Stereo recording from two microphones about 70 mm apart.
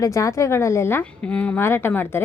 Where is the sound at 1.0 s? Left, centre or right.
Left.